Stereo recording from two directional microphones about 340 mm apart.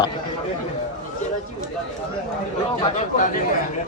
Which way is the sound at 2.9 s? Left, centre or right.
Left.